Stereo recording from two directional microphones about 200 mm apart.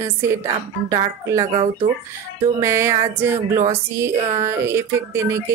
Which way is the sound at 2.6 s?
15° right (ahead or behind).